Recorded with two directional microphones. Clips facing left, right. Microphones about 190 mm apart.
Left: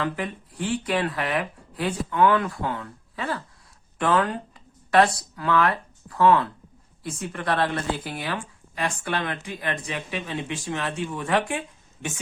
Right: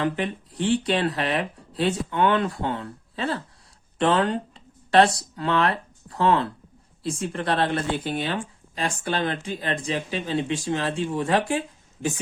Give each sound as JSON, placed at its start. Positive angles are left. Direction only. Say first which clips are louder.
{"t": 0.0, "sound": "speech", "louder": "right 3 dB", "side_deg": -25}
{"t": 3.9, "sound": "a sound", "louder": "right 2 dB", "side_deg": -30}
{"t": 5.4, "sound": "speech", "louder": "even", "side_deg": -25}